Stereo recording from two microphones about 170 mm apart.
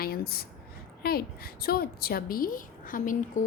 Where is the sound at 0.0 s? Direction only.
65° left (ahead or behind).